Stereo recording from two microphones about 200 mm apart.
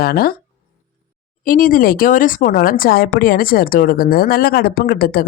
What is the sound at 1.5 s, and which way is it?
Speech, 45° left (ahead or behind).